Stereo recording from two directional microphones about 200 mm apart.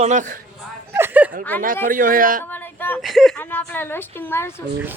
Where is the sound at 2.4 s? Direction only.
10° left (ahead or behind).